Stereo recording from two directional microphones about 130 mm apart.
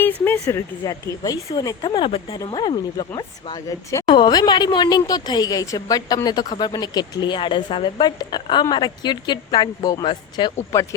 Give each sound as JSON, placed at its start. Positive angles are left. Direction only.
{"t": 0.0, "sound": "speech", "side_deg": 15}
{"t": 2.0, "sound": "speech", "side_deg": 45}
{"t": 2.5, "sound": "speech", "side_deg": 35}
{"t": 10.7, "sound": "speech", "side_deg": 20}